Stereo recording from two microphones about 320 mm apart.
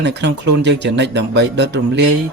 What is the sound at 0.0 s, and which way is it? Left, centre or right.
Speech, right.